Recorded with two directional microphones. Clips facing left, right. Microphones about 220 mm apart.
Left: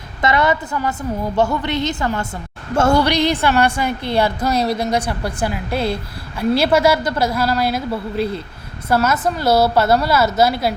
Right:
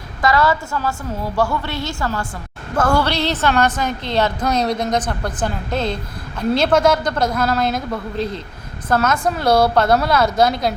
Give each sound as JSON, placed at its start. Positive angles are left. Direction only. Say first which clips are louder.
{"t": 0.2, "sound": "a woman's voice", "louder": "even", "side_deg": 20}
{"t": 3.0, "sound": "a woman's voice", "louder": "left 3 dB", "side_deg": 15}